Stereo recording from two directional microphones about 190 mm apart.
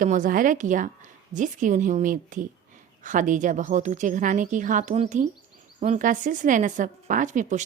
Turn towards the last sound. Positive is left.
turn(degrees=-40)  # may be behind; listen again after turning